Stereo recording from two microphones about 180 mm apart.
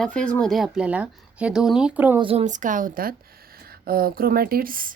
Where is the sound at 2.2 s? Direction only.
35° right (ahead or behind).